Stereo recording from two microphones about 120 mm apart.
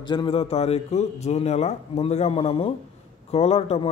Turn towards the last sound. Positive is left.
turn(degrees=60)  # may be behind; listen again after turning